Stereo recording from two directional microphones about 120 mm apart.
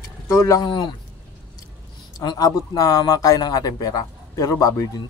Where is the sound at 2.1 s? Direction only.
35° left (ahead or behind).